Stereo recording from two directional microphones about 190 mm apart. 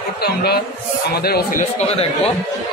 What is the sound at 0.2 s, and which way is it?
Speech, 55° left (ahead or behind).